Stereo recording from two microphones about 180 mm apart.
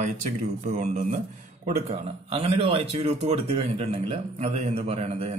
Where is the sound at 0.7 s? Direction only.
40° right (ahead or behind).